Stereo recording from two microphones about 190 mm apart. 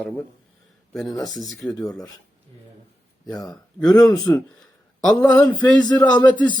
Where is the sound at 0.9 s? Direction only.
Centre (ahead or behind).